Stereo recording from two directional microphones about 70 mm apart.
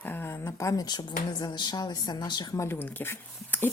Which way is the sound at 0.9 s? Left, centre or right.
Left.